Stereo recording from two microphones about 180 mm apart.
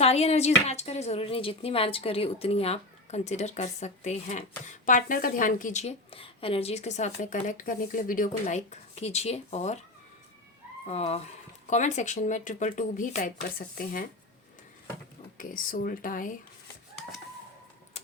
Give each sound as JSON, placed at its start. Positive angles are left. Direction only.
{"t": 0.0, "sound": "speech", "side_deg": 35}
{"t": 10.8, "sound": "speech", "side_deg": 35}
{"t": 15.4, "sound": "speech", "side_deg": 50}